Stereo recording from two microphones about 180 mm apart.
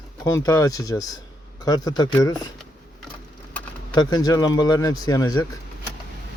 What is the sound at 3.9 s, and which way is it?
Speech, 25° left (ahead or behind).